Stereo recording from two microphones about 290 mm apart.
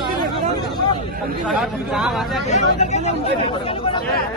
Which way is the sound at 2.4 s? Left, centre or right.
Left.